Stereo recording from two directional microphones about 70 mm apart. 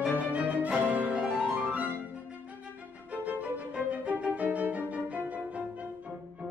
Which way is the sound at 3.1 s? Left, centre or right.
Centre.